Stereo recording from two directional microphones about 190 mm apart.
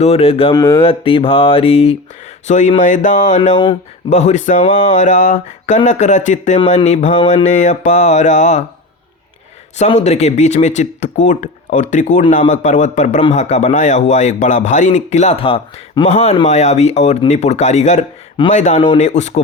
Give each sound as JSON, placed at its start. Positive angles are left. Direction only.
{"t": 0.0, "sound": "a man's voice", "side_deg": 30}
{"t": 0.7, "sound": "mantra", "side_deg": 30}
{"t": 2.5, "sound": "a man's voice", "side_deg": 40}
{"t": 9.7, "sound": "a man's voice", "side_deg": 35}